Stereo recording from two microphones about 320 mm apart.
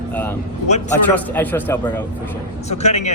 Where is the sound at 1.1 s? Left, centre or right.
Centre.